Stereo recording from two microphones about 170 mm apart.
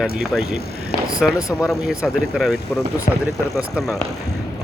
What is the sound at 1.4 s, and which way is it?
Speech, 15° left (ahead or behind).